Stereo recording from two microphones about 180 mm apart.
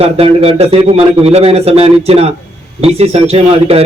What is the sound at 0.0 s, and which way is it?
A man's voice, 35° right (ahead or behind).